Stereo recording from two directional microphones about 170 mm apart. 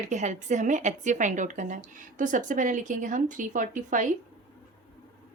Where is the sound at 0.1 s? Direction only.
45° right (ahead or behind).